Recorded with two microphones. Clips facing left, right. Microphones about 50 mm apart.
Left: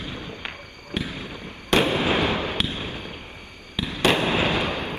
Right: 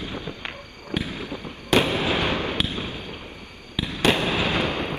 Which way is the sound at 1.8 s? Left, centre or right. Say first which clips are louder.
Left 2 dB; left.